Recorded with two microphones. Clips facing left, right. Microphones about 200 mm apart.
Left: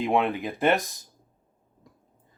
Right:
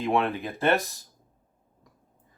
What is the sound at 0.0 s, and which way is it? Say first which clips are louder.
Speech: left 1 dB; 15° left (ahead or behind).